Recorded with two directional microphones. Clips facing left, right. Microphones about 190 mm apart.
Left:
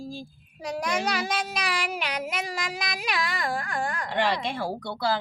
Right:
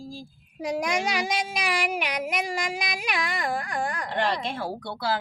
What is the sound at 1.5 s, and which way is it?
Child singing, 10° right (ahead or behind).